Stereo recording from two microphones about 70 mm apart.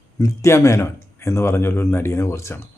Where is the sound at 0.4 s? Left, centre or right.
Left.